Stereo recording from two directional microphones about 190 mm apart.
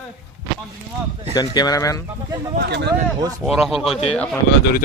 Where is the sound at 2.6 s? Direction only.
60° right (ahead or behind).